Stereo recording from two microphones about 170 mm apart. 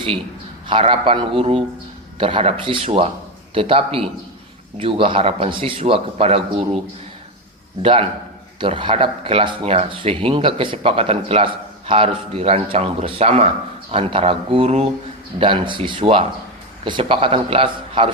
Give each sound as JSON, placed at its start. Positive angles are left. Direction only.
{"t": 0.7, "sound": "speech", "side_deg": -30}
{"t": 7.8, "sound": "speech", "side_deg": -35}